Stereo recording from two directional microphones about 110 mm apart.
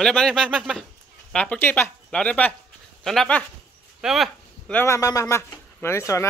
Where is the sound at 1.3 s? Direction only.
10° left (ahead or behind).